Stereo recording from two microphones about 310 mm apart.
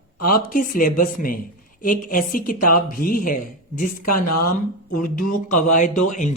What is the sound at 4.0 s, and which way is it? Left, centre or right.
Speech, left.